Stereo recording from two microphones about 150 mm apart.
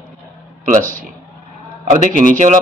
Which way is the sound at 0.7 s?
60° right (ahead or behind).